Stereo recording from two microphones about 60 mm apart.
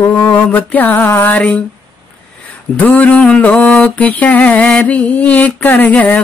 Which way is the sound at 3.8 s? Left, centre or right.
Left.